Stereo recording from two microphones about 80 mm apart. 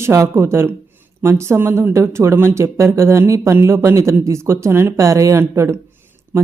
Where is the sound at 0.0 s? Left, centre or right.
Right.